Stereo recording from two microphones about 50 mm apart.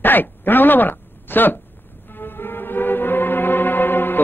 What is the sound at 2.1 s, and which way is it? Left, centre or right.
Music, left.